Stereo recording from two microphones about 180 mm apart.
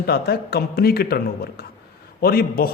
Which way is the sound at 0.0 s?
65° left (ahead or behind).